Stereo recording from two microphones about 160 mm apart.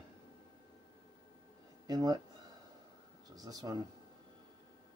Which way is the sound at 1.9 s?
25° right (ahead or behind).